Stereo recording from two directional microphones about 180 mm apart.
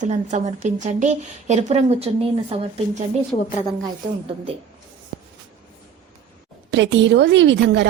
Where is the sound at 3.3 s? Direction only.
25° left (ahead or behind).